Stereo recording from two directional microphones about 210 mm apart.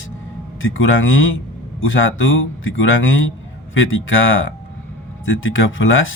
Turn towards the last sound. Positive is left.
turn(degrees=70)  # may be behind; listen again after turning